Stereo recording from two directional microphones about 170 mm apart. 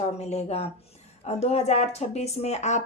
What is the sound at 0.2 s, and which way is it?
A woman's voice, 40° left (ahead or behind).